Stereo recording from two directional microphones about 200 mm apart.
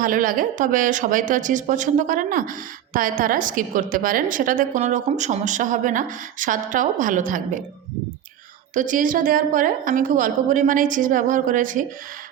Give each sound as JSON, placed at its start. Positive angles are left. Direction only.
{"t": 0.0, "sound": "a woman's voice", "side_deg": -45}
{"t": 8.7, "sound": "a woman's voice", "side_deg": -40}